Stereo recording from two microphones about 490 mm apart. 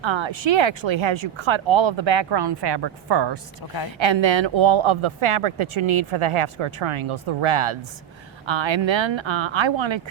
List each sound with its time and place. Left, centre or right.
0.0 s speech: right
8.4 s speech: right